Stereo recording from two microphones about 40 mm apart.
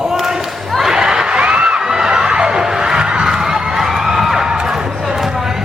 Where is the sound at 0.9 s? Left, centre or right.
Centre.